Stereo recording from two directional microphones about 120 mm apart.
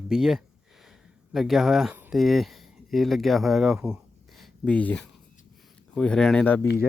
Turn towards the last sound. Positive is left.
turn(degrees=10)  # may be behind; listen again after turning